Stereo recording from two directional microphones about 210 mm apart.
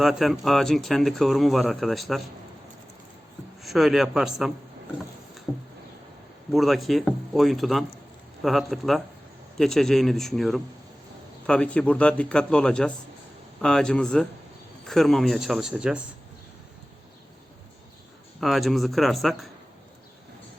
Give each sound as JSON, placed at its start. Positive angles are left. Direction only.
{"t": 0.0, "sound": "speech", "side_deg": 0}
{"t": 3.6, "sound": "speech", "side_deg": 0}
{"t": 6.5, "sound": "speech", "side_deg": 0}
{"t": 18.3, "sound": "speech", "side_deg": 0}